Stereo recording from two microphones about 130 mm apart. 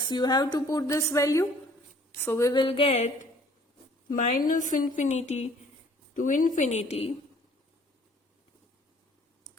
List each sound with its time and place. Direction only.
0.0 s a woman's voice: 35° left (ahead or behind); by 2.5 s 15° left (ahead or behind)
2.5 s a sound: 40° left (ahead or behind)
4.1 s speech: 80° left; by 5.5 s 60° left (ahead or behind)
6.1 s a woman's voice: 80° left; by 7.1 s 55° left (ahead or behind)